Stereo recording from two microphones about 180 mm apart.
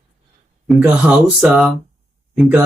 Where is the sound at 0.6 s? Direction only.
5° right (ahead or behind).